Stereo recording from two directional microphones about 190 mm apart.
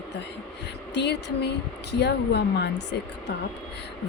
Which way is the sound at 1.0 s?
60° left (ahead or behind).